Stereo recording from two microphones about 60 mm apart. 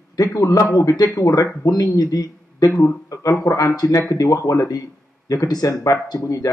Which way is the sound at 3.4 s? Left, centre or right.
Left.